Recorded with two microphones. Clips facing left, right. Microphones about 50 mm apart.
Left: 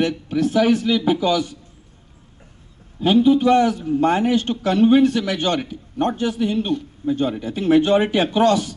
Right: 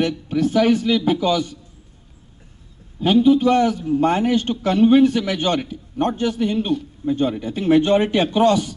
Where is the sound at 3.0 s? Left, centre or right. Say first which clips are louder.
Even; centre.